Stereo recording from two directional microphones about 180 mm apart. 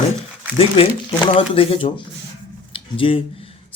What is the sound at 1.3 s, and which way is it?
Speech, 30° left (ahead or behind).